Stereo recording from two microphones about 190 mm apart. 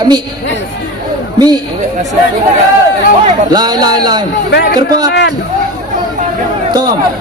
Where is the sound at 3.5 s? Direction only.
20° right (ahead or behind).